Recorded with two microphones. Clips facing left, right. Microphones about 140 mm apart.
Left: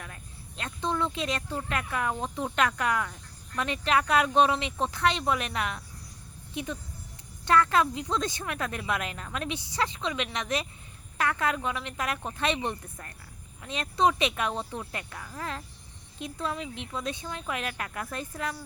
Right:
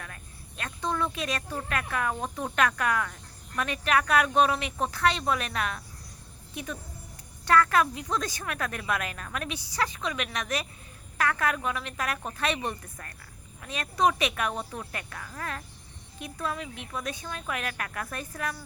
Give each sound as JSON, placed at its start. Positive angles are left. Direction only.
{"t": 0.0, "sound": "a woman's voice", "side_deg": 20}